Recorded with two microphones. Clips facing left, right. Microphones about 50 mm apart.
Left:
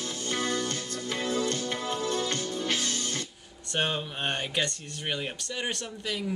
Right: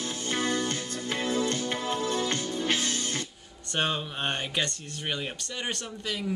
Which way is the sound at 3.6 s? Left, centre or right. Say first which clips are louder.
Even; centre.